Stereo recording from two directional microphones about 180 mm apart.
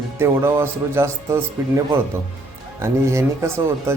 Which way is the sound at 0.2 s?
15° right (ahead or behind).